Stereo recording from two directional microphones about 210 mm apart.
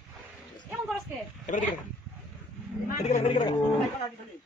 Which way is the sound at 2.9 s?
35° left (ahead or behind).